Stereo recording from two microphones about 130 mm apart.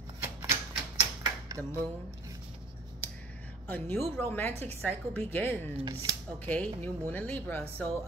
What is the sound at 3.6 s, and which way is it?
Speech, 15° left (ahead or behind).